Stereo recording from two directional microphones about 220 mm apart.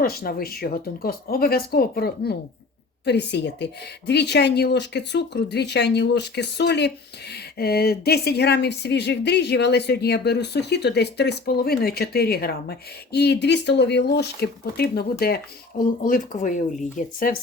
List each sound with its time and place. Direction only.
0.0 s speech: 40° left (ahead or behind)
16.0 s speech: 35° left (ahead or behind)